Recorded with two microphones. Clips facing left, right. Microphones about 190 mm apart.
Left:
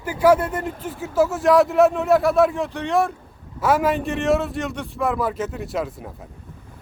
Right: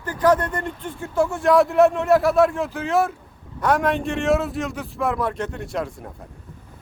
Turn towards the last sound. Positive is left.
turn(degrees=0)  # may be behind; listen again after turning